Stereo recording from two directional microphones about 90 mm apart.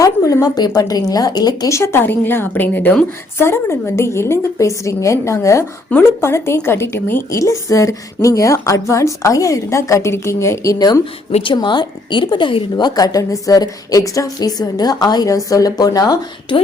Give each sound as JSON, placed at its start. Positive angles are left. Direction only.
{"t": 0.0, "sound": "a woman's voice", "side_deg": 40}
{"t": 1.7, "sound": "a woman's voice", "side_deg": 30}
{"t": 11.4, "sound": "a woman's voice", "side_deg": 60}
{"t": 12.8, "sound": "a woman's voice", "side_deg": 40}